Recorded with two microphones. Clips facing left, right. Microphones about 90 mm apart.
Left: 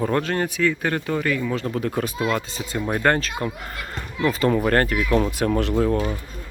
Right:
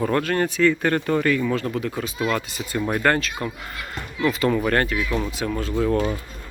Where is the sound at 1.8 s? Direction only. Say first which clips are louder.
Left 3 dB; 55° left (ahead or behind).